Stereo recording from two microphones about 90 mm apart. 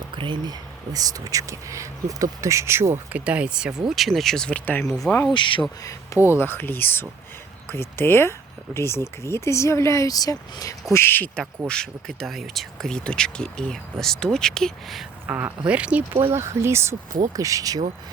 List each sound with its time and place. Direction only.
0.2 s speech: 65° right (ahead or behind)
0.9 s speech: 45° right (ahead or behind); by 4.8 s 15° left (ahead or behind)
4.8 s speech: 5° left (ahead or behind)
5.3 s speech: 65° left (ahead or behind)
5.8 s speech: 40° left (ahead or behind)
6.3 s speech: 25° left (ahead or behind); by 10.8 s 45° left (ahead or behind)
10.9 s speech: 25° left (ahead or behind)
11.7 s speech: 5° left (ahead or behind)
15.3 s speech: 20° right (ahead or behind)
16.3 s speech: 30° right (ahead or behind)
17.2 s speech: 40° right (ahead or behind)